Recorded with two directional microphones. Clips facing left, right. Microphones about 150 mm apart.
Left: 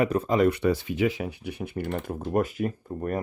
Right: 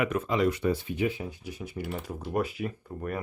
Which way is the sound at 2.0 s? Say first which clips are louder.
Left 4 dB; 45° left (ahead or behind).